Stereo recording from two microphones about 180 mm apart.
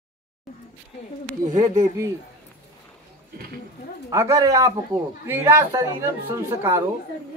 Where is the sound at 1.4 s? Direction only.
45° right (ahead or behind).